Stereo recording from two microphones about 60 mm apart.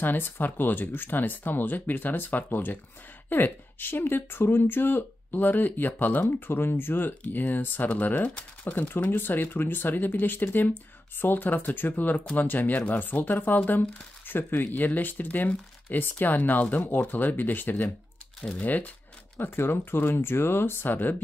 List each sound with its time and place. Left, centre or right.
0.0 s speech: left
8.7 s speech: left
18.4 s speech: centre
19.3 s speech: left